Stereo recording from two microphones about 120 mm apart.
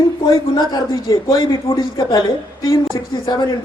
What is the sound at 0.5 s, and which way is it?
A woman's voice, 35° left (ahead or behind).